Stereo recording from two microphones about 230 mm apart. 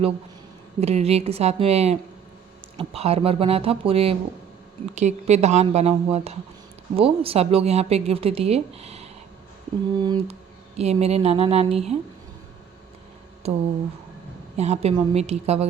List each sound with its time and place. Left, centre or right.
0.8 s speech: right
13.4 s speech: right